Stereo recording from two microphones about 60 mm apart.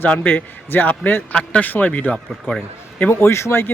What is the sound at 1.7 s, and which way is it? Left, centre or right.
Speech, left.